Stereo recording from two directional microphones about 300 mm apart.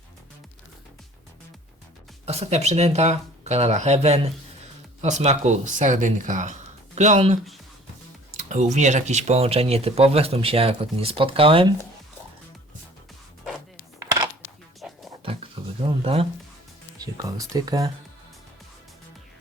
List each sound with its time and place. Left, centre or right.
2.2 s speech: right
14.8 s music: centre
15.6 s a sound: centre
17.0 s speech: centre